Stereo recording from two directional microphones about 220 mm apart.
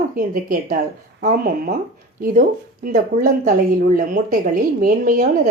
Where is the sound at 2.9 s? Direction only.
40° right (ahead or behind).